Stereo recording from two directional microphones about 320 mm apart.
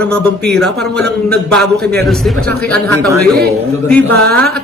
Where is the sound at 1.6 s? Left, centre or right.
Right.